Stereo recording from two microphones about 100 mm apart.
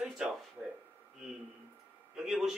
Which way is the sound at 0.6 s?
5° left (ahead or behind).